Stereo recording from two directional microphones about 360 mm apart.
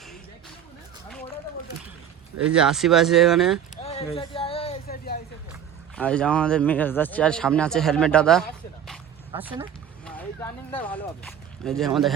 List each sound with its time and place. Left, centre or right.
2.5 s speech: centre
3.8 s a sound: centre
6.0 s speech: centre